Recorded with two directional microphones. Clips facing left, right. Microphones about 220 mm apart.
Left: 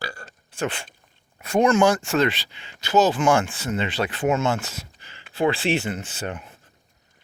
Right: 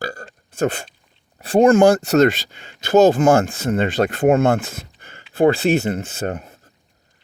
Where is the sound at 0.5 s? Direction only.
40° right (ahead or behind).